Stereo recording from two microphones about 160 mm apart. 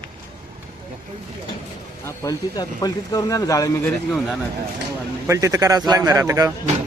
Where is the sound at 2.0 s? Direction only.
20° left (ahead or behind).